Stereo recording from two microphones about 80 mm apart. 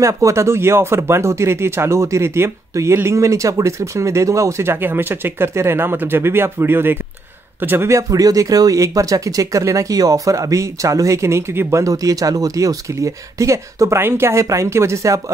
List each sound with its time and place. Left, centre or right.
0.0 s speech: right
8.1 s speech: right